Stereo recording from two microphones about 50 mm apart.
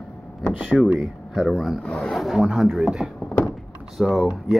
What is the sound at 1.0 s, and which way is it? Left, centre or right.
Speech, centre.